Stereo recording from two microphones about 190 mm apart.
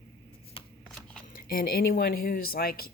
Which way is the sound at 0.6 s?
30° left (ahead or behind).